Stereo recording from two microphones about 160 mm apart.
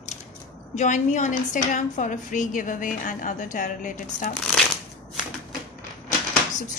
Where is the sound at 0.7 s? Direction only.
50° left (ahead or behind).